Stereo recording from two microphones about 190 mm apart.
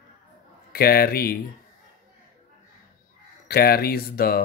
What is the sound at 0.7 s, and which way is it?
Speech, 55° left (ahead or behind).